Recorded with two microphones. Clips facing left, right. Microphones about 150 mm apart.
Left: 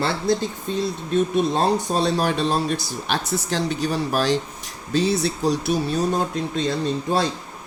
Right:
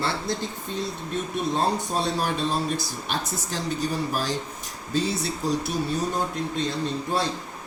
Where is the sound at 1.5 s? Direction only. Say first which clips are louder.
Left 4 dB; 90° left.